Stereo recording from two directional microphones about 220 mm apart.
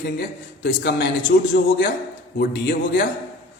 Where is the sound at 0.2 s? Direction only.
50° left (ahead or behind).